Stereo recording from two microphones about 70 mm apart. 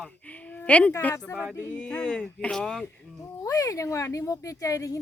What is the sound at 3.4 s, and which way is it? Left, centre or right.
Speech, left.